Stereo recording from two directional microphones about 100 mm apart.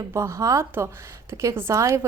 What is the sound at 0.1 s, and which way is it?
A woman's voice, 30° right (ahead or behind).